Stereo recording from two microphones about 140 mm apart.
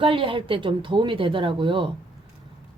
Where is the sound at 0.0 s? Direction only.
40° right (ahead or behind).